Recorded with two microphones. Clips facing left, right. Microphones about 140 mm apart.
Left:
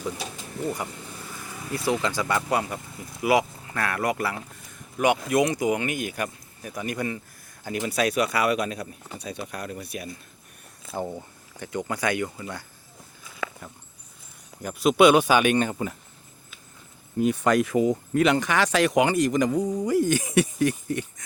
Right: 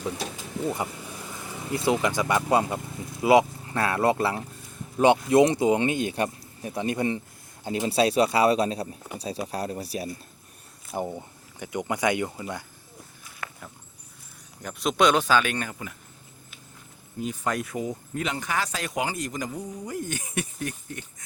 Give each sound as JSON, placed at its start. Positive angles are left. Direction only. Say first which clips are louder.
{"t": 0.7, "sound": "speech", "louder": "right 1 dB", "side_deg": -20}
{"t": 10.9, "sound": "speech", "louder": "even", "side_deg": -15}
{"t": 14.6, "sound": "speech", "louder": "left 5 dB", "side_deg": 5}
{"t": 15.7, "sound": "speech", "louder": "left 8 dB", "side_deg": 35}
{"t": 17.2, "sound": "speech", "louder": "left 8 dB", "side_deg": 70}